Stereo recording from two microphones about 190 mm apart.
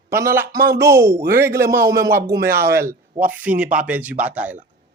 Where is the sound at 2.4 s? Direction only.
55° right (ahead or behind).